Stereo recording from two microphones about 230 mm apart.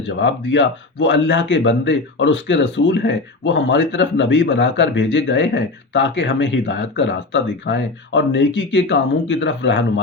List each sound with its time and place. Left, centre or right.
0.2 s speech: left